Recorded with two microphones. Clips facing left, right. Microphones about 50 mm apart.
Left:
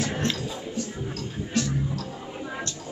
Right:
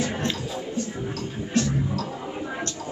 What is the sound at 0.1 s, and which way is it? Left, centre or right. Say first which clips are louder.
Music: even; centre.